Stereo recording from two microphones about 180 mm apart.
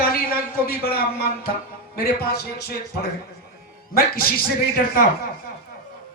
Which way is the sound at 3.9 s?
55° left (ahead or behind).